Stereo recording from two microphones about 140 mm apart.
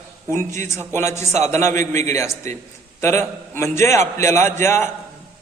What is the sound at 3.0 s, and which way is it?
A man's voice, 20° left (ahead or behind).